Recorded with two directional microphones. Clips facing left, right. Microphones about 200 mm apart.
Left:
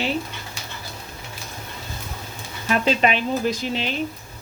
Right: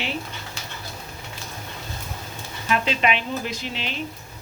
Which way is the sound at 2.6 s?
40° left (ahead or behind).